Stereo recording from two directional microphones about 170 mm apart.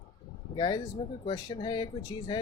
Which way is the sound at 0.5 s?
25° left (ahead or behind).